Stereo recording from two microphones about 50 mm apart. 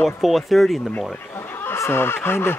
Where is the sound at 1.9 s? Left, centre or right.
Left.